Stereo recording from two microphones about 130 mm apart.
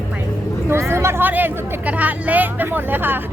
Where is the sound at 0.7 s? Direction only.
20° right (ahead or behind).